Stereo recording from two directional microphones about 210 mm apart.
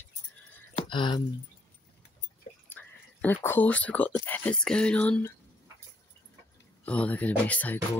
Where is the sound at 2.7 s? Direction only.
10° left (ahead or behind).